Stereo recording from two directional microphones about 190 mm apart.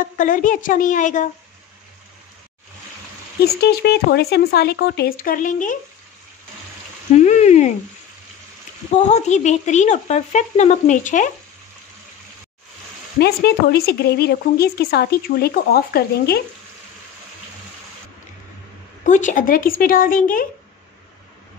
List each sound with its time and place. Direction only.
0.2 s speech: 45° left (ahead or behind)
3.4 s speech: 60° left (ahead or behind); by 5.8 s 45° left (ahead or behind)
7.2 s a sound: 35° left (ahead or behind)
8.9 s speech: 35° left (ahead or behind)
13.2 s speech: 55° left (ahead or behind)
19.0 s speech: 40° left (ahead or behind)